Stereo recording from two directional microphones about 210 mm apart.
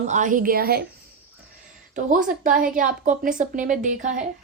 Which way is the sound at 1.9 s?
35° right (ahead or behind).